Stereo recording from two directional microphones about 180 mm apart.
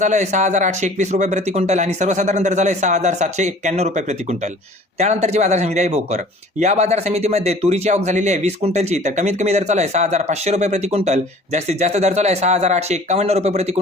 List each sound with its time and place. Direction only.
0.0 s speech: 40° right (ahead or behind)